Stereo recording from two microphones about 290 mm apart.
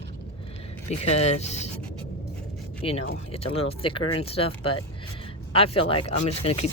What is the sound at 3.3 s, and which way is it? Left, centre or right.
Rub, centre.